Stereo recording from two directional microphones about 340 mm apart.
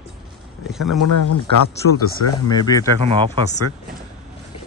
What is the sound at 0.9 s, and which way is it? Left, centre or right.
Speech, left.